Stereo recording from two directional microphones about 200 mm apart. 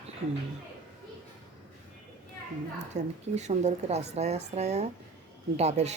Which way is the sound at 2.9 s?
35° right (ahead or behind).